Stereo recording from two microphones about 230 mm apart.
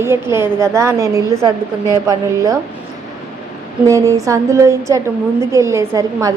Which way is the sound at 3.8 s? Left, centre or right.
Centre.